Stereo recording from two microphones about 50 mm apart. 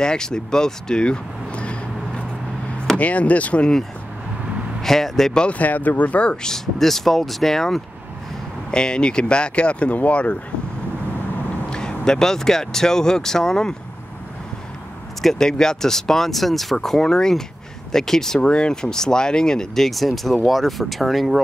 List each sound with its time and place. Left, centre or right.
0.0 s speech: centre
4.8 s speech: centre
5.4 s speech: left
6.4 s speech: centre; by 10.3 s left
11.7 s speech: centre
15.2 s speech: centre